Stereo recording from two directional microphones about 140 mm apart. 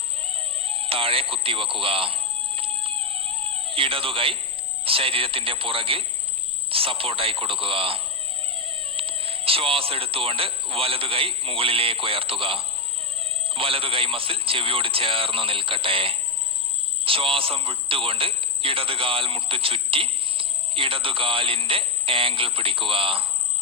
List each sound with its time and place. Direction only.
0.2 s music: 40° right (ahead or behind)
4.9 s a man's voice: 40° right (ahead or behind)